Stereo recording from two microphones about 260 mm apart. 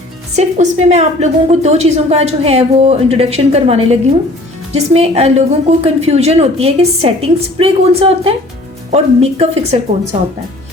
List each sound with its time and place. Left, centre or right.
0.3 s a woman's voice: right